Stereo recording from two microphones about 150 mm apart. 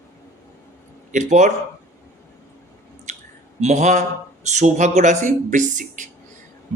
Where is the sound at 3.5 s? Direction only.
50° right (ahead or behind).